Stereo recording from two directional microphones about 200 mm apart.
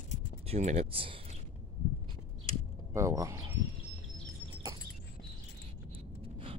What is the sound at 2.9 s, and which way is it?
Speech, 15° right (ahead or behind).